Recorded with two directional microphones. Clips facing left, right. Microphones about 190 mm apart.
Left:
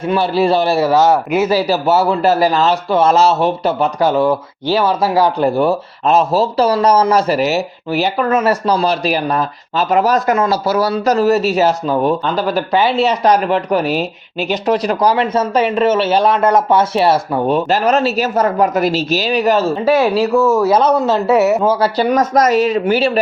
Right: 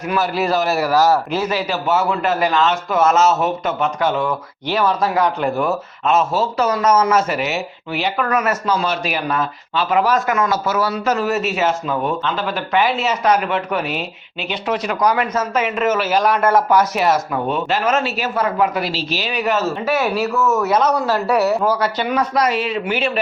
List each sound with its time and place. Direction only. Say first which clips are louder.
0.1 s a man's voice: left 5 dB; 30° left (ahead or behind)
1.5 s speech: left 6 dB; 35° left (ahead or behind)
8.3 s speech: left 5 dB; 30° left (ahead or behind)
21.9 s speech: left 6 dB; 40° left (ahead or behind)